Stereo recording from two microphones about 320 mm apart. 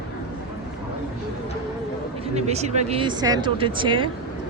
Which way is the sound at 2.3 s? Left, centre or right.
Centre.